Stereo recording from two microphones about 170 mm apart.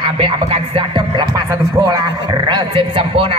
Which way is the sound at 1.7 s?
20° right (ahead or behind).